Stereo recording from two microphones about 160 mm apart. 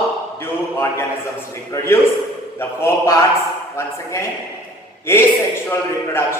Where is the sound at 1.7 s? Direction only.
20° left (ahead or behind).